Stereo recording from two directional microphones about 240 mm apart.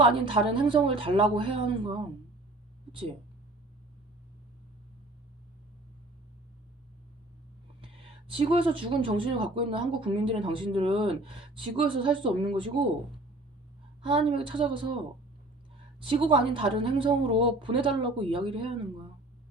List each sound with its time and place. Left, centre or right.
0.1 s speech: right
8.3 s speech: right
14.1 s speech: right
16.0 s speech: right